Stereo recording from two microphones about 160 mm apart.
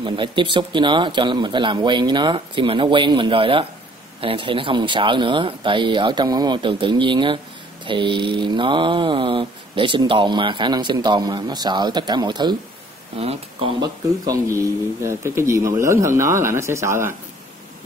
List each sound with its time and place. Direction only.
0.0 s mantra: 30° right (ahead or behind)
4.2 s speech: 35° right (ahead or behind)
7.8 s mantra: 30° right (ahead or behind)
13.7 s speech: 20° right (ahead or behind)